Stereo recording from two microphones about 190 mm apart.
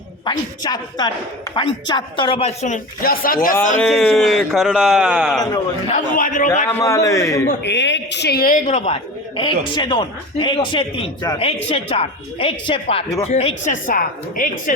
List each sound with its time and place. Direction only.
0.3 s speech: 20° left (ahead or behind); by 3.5 s 45° left (ahead or behind)
3.8 s speech: centre (ahead or behind)
5.9 s speech: 45° left (ahead or behind)
6.7 s a man's voice: 15° left (ahead or behind)
7.6 s a woman's voice: 65° left (ahead or behind); by 9.0 s 40° left (ahead or behind)
9.4 s speech: 25° left (ahead or behind); by 14.5 s 45° left (ahead or behind)